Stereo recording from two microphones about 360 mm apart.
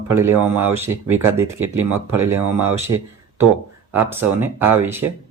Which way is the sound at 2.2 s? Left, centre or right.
Right.